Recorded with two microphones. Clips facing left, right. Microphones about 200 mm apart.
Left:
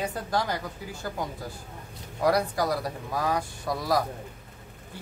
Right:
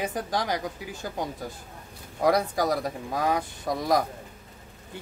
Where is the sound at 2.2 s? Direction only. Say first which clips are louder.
Right 1 dB; 20° right (ahead or behind).